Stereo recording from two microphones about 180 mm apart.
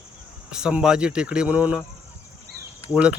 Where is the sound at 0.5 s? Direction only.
5° right (ahead or behind).